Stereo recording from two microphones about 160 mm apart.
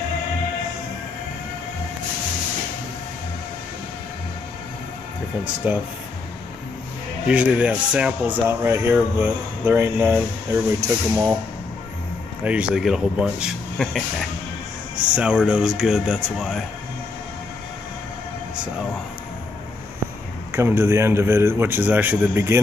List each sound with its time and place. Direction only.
5.6 s speech: 10° right (ahead or behind)
7.2 s speech: 10° right (ahead or behind)
12.4 s speech: 5° right (ahead or behind)
15.1 s speech: 5° right (ahead or behind)
20.5 s speech: 15° right (ahead or behind)